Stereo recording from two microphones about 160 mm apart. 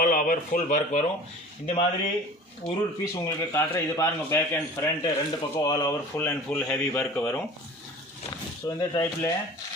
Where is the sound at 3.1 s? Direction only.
20° left (ahead or behind).